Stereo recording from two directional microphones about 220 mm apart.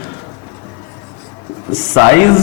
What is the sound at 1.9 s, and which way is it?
Speech, 15° left (ahead or behind).